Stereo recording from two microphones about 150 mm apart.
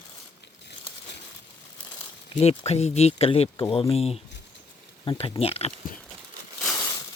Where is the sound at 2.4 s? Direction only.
40° left (ahead or behind).